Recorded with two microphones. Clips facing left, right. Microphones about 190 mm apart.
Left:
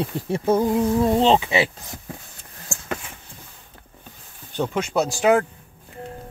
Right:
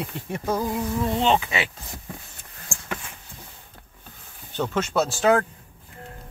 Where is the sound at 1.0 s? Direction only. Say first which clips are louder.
Left 3 dB; 40° left (ahead or behind).